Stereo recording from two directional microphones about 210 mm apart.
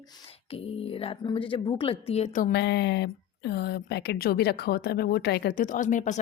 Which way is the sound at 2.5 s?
55° left (ahead or behind).